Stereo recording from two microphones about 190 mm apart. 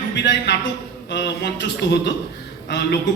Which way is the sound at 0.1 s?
65° left (ahead or behind).